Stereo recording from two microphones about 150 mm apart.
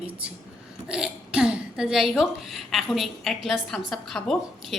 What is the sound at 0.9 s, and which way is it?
A woman's voice, 5° right (ahead or behind).